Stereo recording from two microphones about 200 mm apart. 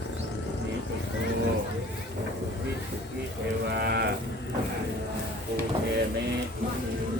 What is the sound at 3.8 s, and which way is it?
Sheep, 55° right (ahead or behind).